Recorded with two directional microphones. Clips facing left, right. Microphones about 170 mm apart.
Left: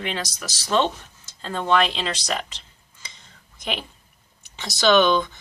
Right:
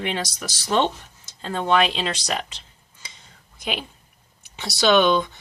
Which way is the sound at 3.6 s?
10° right (ahead or behind).